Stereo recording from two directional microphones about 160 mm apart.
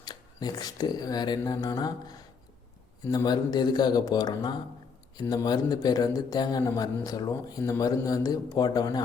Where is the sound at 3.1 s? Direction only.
25° left (ahead or behind).